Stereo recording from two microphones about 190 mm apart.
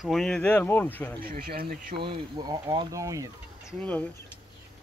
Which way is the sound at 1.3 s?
55° right (ahead or behind).